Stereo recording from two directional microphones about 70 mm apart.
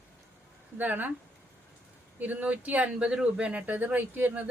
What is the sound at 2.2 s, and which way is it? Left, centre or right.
Speech, right.